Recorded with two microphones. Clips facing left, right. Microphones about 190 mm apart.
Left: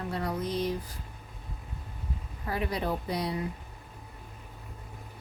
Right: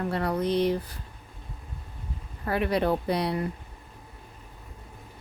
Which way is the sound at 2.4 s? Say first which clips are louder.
Right 6 dB; 65° right (ahead or behind).